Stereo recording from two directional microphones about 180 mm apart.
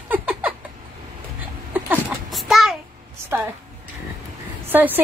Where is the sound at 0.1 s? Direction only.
10° right (ahead or behind).